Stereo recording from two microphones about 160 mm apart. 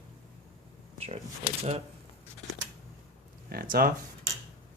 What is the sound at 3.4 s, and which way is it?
Speech, 65° right (ahead or behind).